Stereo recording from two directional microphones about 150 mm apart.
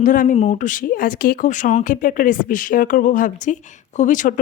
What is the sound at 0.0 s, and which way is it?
Speech, 60° left (ahead or behind).